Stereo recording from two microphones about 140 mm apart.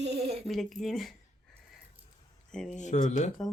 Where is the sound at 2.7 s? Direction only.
60° left (ahead or behind).